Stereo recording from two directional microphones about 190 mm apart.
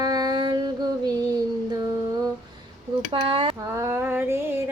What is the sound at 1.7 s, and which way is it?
Music, 20° right (ahead or behind).